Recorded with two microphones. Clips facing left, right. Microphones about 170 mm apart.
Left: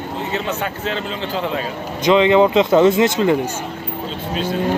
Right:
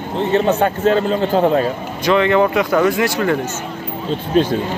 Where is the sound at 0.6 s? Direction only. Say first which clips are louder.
Right 9 dB; 45° right (ahead or behind).